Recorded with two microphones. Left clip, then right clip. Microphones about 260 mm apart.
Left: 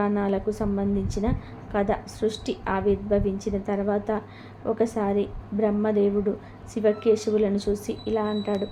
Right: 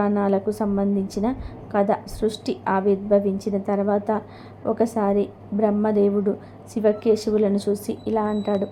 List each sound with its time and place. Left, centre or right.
0.0 s a woman's voice: right